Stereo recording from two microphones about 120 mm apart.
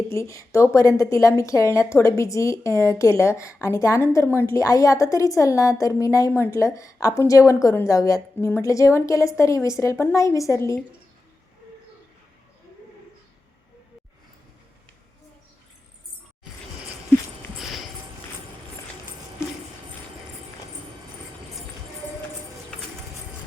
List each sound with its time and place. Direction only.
0.1 s a woman's voice: 25° left (ahead or behind)
17.6 s music: centre (ahead or behind)
19.4 s music: 20° left (ahead or behind)